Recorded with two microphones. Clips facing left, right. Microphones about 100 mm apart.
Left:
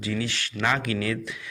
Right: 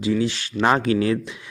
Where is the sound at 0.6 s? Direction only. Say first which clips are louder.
Right 7 dB; 35° right (ahead or behind).